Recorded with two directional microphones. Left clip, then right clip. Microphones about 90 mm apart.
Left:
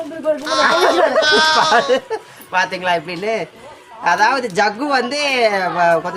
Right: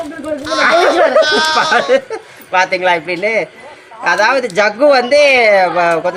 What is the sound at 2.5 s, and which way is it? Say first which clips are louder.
Speech: right 5 dB; 40° left (ahead or behind).